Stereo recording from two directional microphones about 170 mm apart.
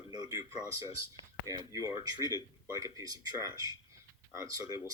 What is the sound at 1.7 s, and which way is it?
Speech, 20° right (ahead or behind).